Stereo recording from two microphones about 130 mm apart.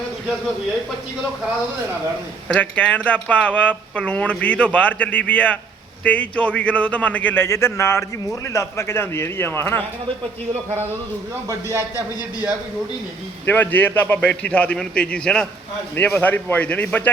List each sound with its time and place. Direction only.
2.5 s a man's voice: 10° left (ahead or behind)
11.9 s a man's voice: 10° right (ahead or behind)
13.4 s speech: 15° left (ahead or behind)